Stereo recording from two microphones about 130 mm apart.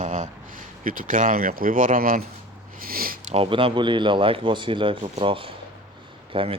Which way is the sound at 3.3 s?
45° right (ahead or behind).